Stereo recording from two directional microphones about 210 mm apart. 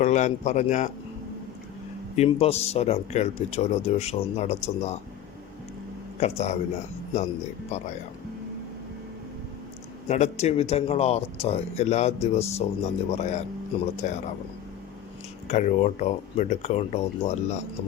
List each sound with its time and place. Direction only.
0.0 s speech: 35° left (ahead or behind)
2.1 s speech: 30° left (ahead or behind)
6.1 s speech: 30° left (ahead or behind)
7.7 s speech: 35° left (ahead or behind)
10.1 s speech: 35° left (ahead or behind)
15.4 s speech: 35° left (ahead or behind)